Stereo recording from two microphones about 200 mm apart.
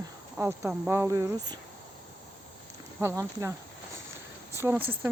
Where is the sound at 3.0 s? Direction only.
15° right (ahead or behind).